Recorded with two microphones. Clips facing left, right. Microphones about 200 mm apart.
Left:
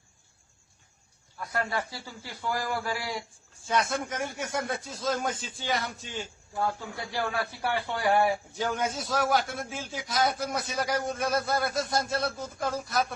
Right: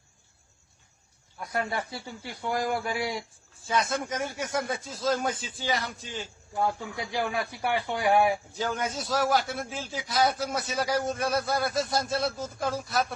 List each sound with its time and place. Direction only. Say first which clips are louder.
1.4 s speech: even; 20° right (ahead or behind)
3.7 s a man's voice: even; centre (ahead or behind)
6.6 s a man's voice: right 2 dB; 15° right (ahead or behind)
8.5 s a man's voice: left 1 dB; centre (ahead or behind)